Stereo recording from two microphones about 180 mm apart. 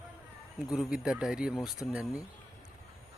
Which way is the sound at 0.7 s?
5° right (ahead or behind).